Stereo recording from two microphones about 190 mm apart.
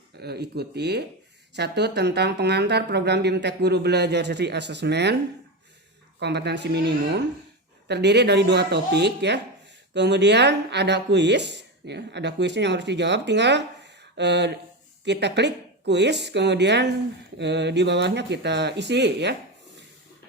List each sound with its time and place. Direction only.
0.2 s speech: 60° right (ahead or behind)
6.1 s speech: 60° right (ahead or behind)